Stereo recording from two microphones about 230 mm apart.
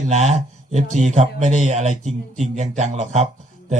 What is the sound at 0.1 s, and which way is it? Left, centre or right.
Speech, right.